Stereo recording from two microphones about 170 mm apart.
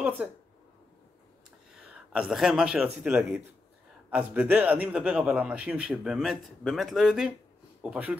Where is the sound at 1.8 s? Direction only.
5° right (ahead or behind).